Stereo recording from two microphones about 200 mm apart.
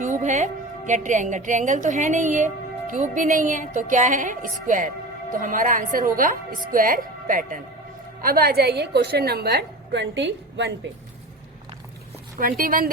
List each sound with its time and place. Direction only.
0.0 s a woman's voice: 40° right (ahead or behind); by 10.7 s 60° right (ahead or behind)
12.4 s a woman's voice: 45° right (ahead or behind)